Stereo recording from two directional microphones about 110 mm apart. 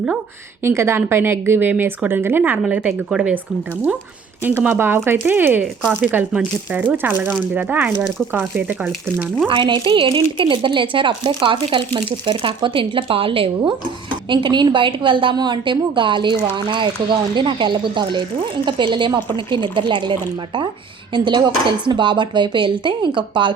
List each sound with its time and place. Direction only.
0.6 s speech: 25° right (ahead or behind); by 3.4 s 10° right (ahead or behind)
4.4 s speech: 20° right (ahead or behind)
9.5 s a woman's voice: 50° right (ahead or behind)